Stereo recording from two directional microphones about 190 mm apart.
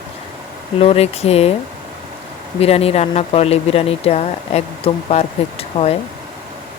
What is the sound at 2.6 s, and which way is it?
Speech, 30° left (ahead or behind).